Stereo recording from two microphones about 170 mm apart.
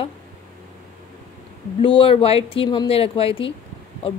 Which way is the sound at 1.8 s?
30° left (ahead or behind).